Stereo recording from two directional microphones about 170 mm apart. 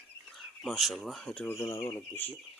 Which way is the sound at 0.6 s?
Centre (ahead or behind).